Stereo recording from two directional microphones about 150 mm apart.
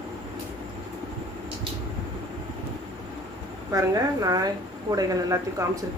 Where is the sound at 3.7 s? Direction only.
20° right (ahead or behind).